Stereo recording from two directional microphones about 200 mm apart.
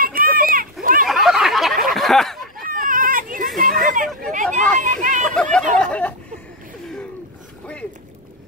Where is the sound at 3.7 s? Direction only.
40° right (ahead or behind).